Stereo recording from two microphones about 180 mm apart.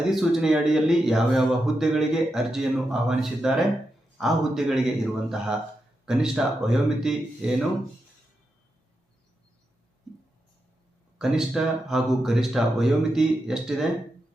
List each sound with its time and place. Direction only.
0.1 s speech: centre (ahead or behind)
11.2 s speech: 5° right (ahead or behind)